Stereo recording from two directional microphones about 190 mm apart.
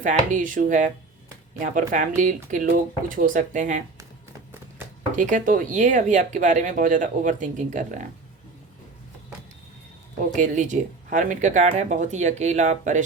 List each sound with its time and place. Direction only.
0.0 s speech: 40° right (ahead or behind)
5.1 s speech: 40° right (ahead or behind)
10.3 s speech: 40° right (ahead or behind)